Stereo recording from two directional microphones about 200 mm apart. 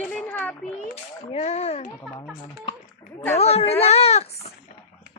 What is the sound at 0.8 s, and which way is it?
A child's voice, 30° left (ahead or behind).